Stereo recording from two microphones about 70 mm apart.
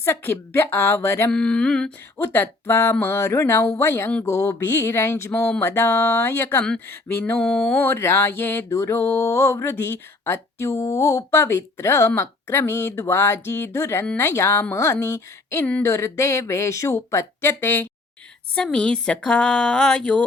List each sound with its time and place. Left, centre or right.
0.0 s speech: left
1.3 s speech: centre
2.1 s speech: left
4.3 s speech: left
4.5 s speech: left
7.3 s speech: centre
7.7 s speech: left
18.5 s speech: centre